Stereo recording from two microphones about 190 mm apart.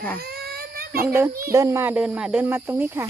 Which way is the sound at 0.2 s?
55° right (ahead or behind).